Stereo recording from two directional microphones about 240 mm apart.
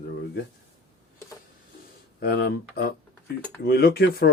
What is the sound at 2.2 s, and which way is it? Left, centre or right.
Speech, left.